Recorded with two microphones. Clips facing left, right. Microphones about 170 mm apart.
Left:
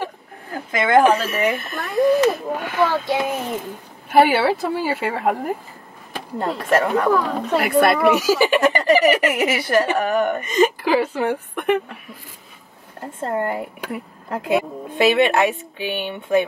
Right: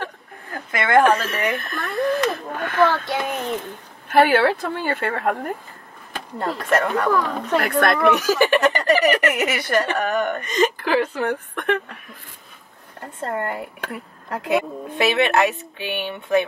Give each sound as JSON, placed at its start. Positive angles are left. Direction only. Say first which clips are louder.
{"t": 0.0, "sound": "a sound", "louder": "left 3 dB", "side_deg": 10}
{"t": 2.0, "sound": "speech", "louder": "left 6 dB", "side_deg": 10}
{"t": 13.2, "sound": "speech", "louder": "left 3 dB", "side_deg": 10}